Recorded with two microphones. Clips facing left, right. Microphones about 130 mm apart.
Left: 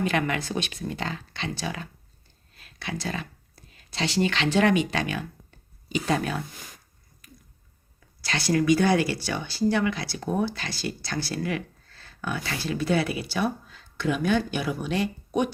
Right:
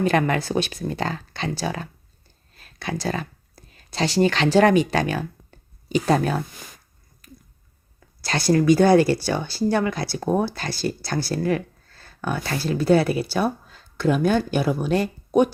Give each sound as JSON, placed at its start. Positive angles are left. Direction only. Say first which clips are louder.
{"t": 0.0, "sound": "speech", "louder": "right 6 dB", "side_deg": -40}
{"t": 8.2, "sound": "speech", "louder": "right 5 dB", "side_deg": -40}